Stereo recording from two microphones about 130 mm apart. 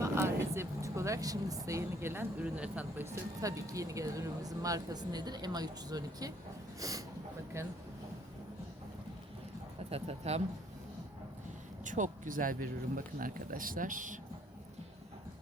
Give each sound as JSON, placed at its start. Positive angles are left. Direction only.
{"t": 0.0, "sound": "speech", "side_deg": -20}
{"t": 9.9, "sound": "speech", "side_deg": -55}
{"t": 11.9, "sound": "speech", "side_deg": -75}